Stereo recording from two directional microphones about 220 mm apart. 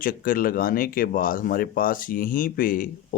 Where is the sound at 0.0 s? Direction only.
40° left (ahead or behind).